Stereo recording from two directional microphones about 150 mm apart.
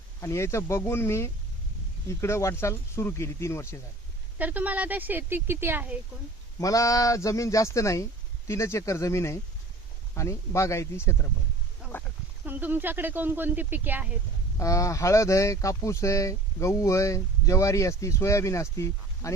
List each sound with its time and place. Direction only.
0.2 s speech: 20° left (ahead or behind)
4.4 s speech: 10° right (ahead or behind)
6.6 s speech: 20° left (ahead or behind)
12.5 s speech: 10° right (ahead or behind)
14.6 s speech: 20° left (ahead or behind)